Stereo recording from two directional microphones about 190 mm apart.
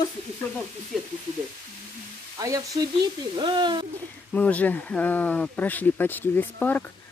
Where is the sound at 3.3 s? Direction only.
25° right (ahead or behind).